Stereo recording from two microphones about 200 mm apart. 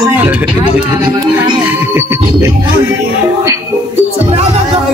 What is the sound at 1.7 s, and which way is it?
A man's voice, 10° right (ahead or behind).